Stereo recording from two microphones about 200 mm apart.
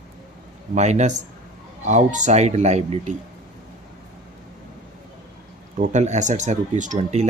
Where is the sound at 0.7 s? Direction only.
35° right (ahead or behind).